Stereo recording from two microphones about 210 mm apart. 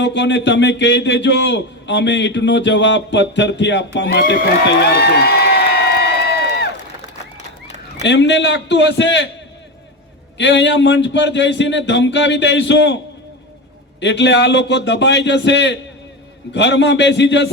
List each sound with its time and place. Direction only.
0.0 s a man's voice: 55° left (ahead or behind)
8.0 s a man's voice: 55° left (ahead or behind)
10.3 s a man's voice: 60° left (ahead or behind)
14.0 s a man's voice: 55° left (ahead or behind)